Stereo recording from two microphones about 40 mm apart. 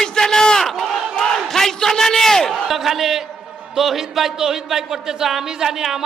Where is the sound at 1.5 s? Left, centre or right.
Centre.